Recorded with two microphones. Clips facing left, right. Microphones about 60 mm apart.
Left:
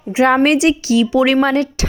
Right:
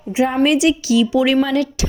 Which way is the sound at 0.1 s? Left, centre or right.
Left.